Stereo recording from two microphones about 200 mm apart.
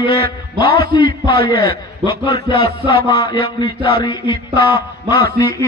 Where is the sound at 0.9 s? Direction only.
20° left (ahead or behind).